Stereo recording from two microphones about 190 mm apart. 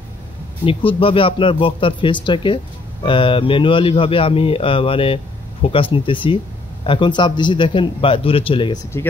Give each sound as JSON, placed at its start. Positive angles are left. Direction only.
{"t": 0.7, "sound": "speech", "side_deg": 30}